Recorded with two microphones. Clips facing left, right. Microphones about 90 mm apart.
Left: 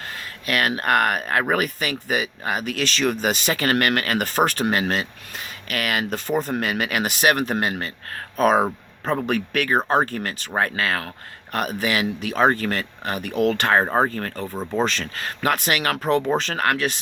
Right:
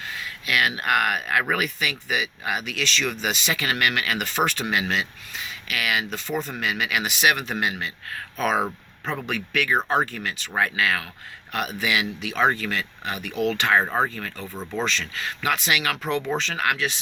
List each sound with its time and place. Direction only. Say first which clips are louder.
0.4 s speech: left 2 dB; 45° left (ahead or behind)